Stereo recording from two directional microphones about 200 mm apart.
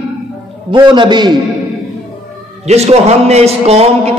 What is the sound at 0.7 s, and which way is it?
Speech, 25° right (ahead or behind).